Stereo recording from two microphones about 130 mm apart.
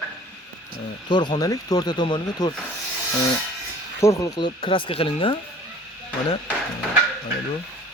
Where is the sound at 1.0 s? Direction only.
35° left (ahead or behind).